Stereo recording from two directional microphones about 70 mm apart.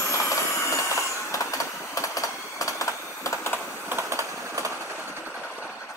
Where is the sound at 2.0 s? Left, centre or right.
Left.